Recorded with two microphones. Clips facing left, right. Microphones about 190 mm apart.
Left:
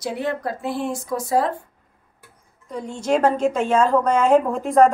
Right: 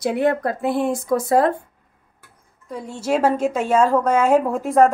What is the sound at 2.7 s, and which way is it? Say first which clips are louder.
A woman's voice: left 1 dB; 5° right (ahead or behind).